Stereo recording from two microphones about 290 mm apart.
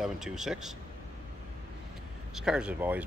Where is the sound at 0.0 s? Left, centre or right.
Centre.